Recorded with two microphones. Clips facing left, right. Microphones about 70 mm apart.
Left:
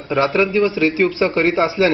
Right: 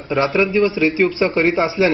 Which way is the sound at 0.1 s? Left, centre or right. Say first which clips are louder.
Even; centre.